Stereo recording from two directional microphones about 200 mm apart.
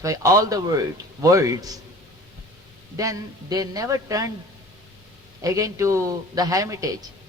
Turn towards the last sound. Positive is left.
turn(degrees=-15)  # may be behind; listen again after turning